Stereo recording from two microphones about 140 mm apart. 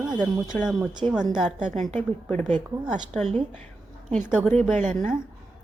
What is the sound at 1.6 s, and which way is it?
Speech, 65° right (ahead or behind).